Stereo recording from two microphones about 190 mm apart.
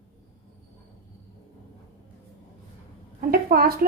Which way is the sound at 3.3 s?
55° right (ahead or behind).